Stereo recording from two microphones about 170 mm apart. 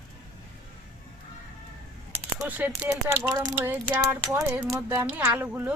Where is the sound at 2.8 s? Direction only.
15° right (ahead or behind).